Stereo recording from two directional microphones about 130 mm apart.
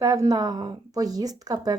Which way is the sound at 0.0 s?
25° right (ahead or behind).